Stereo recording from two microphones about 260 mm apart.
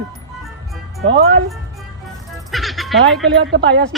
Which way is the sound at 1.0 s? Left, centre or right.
Right.